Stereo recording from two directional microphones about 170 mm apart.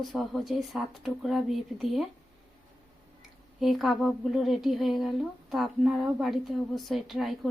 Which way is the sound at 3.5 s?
Centre (ahead or behind).